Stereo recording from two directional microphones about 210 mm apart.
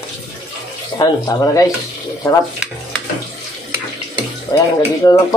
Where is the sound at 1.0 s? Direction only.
15° left (ahead or behind).